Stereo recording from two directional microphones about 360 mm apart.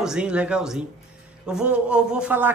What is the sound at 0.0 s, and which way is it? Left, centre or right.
Speech, centre.